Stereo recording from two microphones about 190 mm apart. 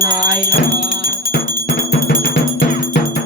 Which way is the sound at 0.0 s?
45° left (ahead or behind).